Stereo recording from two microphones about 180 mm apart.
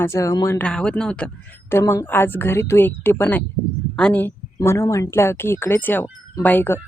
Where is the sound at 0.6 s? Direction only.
5° left (ahead or behind).